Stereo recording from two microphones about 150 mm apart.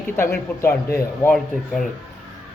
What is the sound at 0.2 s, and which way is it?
A man's voice, 15° left (ahead or behind).